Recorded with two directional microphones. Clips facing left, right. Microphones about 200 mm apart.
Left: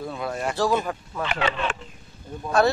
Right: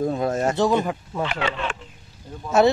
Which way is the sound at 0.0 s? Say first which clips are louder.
Right 7 dB; 40° right (ahead or behind).